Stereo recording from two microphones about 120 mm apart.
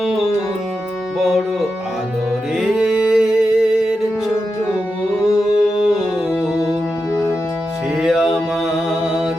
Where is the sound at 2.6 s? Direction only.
5° right (ahead or behind).